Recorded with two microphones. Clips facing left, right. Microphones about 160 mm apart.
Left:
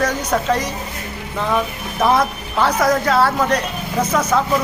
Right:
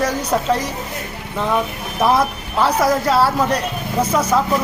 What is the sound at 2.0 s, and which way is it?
Speech, 5° right (ahead or behind).